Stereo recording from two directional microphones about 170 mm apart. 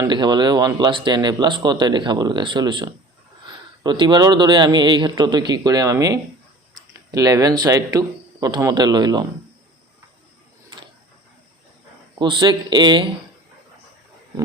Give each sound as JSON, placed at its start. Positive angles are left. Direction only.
{"t": 0.0, "sound": "speech", "side_deg": -25}
{"t": 12.2, "sound": "speech", "side_deg": -25}